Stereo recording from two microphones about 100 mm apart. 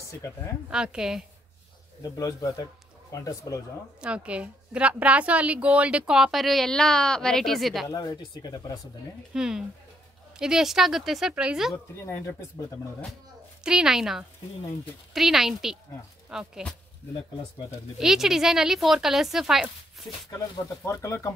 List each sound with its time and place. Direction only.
0.7 s a woman's voice: 10° right (ahead or behind)
2.1 s speech: 30° left (ahead or behind)
4.0 s a woman's voice: 10° right (ahead or behind)
7.9 s speech: 40° left (ahead or behind)
9.3 s speech: 5° right (ahead or behind)
12.0 s speech: 25° left (ahead or behind)
13.7 s speech: 5° right (ahead or behind)
17.9 s speech: 5° right (ahead or behind)
20.8 s speech: 30° left (ahead or behind)